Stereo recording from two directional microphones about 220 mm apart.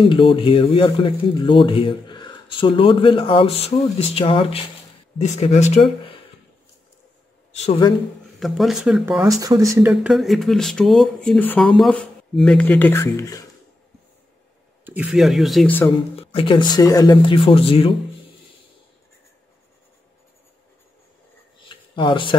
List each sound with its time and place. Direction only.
0.0 s speech: 25° left (ahead or behind)
8.4 s speech: centre (ahead or behind)
9.2 s speech: 15° right (ahead or behind)
9.8 s speech: 5° right (ahead or behind); by 13.5 s 15° left (ahead or behind)
14.9 s speech: 5° right (ahead or behind)
16.2 s speech: 25° left (ahead or behind)
21.6 s a sound: 20° left (ahead or behind)